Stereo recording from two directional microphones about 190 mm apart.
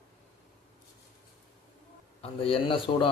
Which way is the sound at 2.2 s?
30° left (ahead or behind).